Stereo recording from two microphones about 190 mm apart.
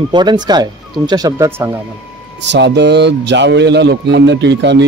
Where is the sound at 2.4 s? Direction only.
65° right (ahead or behind).